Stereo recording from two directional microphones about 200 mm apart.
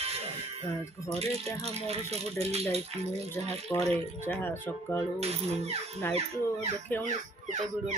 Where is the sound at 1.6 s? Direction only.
30° right (ahead or behind).